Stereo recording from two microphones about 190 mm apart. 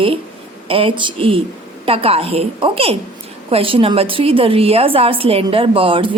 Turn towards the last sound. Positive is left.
turn(degrees=-25)  # may be behind; listen again after turning